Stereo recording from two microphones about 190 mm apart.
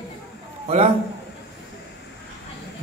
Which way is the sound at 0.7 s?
30° right (ahead or behind).